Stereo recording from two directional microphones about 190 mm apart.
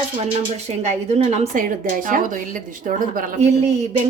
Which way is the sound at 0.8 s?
35° right (ahead or behind).